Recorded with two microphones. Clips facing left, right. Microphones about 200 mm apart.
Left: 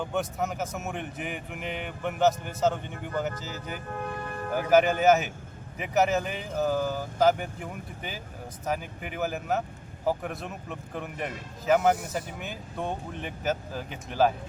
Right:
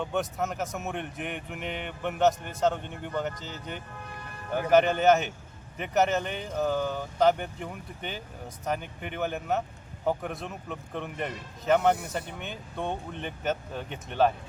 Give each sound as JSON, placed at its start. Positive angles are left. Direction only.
{"t": 0.0, "sound": "speech", "side_deg": 0}
{"t": 3.9, "sound": "music", "side_deg": 50}
{"t": 4.5, "sound": "speech", "side_deg": 5}